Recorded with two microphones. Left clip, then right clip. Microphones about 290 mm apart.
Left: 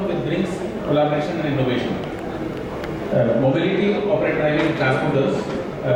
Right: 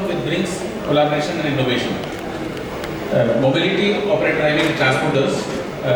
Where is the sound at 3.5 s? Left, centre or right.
Centre.